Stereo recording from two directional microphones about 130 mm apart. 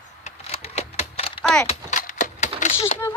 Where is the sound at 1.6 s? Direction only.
75° left (ahead or behind).